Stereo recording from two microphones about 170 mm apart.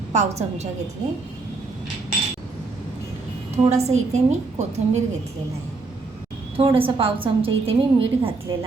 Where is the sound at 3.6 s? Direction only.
40° right (ahead or behind).